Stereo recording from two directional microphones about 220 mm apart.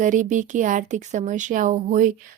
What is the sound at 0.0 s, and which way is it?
Speech, 35° right (ahead or behind).